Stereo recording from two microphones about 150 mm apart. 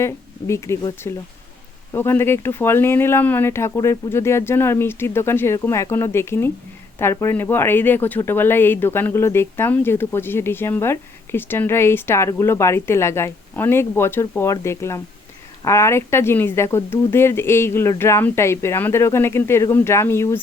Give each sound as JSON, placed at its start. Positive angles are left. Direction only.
{"t": 0.0, "sound": "speech", "side_deg": 20}